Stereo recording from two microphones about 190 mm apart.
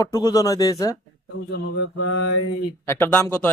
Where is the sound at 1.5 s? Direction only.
80° left.